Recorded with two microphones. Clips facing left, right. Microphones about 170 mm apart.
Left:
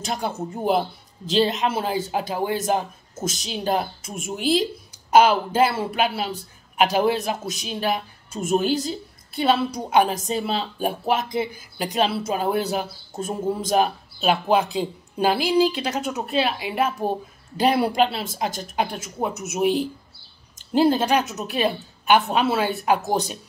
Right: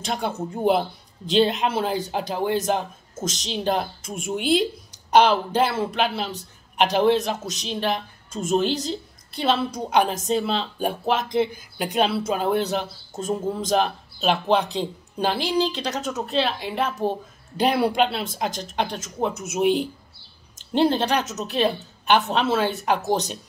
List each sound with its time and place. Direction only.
0.0 s a man's voice: centre (ahead or behind)
5.1 s a man's voice: 5° left (ahead or behind)
9.8 s a man's voice: 5° left (ahead or behind)